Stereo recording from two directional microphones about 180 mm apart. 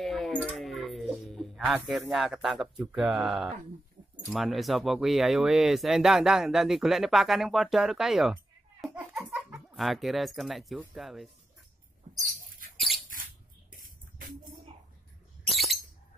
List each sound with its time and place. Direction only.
0.0 s a sound: centre (ahead or behind)
1.9 s speech: centre (ahead or behind)
8.8 s laughter: 10° right (ahead or behind)
9.3 s a sound: 10° right (ahead or behind)
9.8 s speech: centre (ahead or behind)
12.1 s rodents: 50° right (ahead or behind)
12.7 s rodents: centre (ahead or behind)
13.7 s music: 50° right (ahead or behind)
15.5 s a sound: centre (ahead or behind)